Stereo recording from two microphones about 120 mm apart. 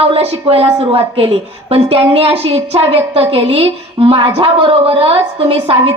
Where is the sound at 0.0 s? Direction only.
55° right (ahead or behind).